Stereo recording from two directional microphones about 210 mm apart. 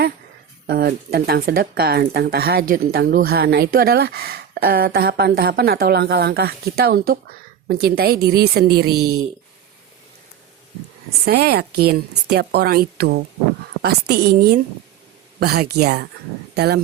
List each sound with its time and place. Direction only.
0.7 s speech: 45° right (ahead or behind)
9.0 s speech: 90° right
11.3 s speech: 50° right (ahead or behind)